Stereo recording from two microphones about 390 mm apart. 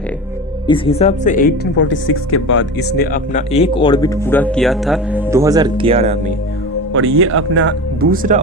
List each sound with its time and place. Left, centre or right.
0.7 s speech: centre
6.9 s speech: right